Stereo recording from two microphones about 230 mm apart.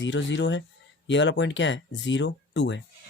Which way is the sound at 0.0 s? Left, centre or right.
Left.